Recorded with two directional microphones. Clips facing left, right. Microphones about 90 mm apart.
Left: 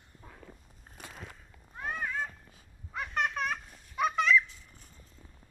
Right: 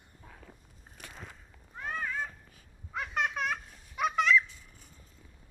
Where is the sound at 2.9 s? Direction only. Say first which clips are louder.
Even; centre (ahead or behind).